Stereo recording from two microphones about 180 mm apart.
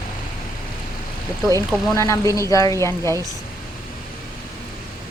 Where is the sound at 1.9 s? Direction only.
15° left (ahead or behind).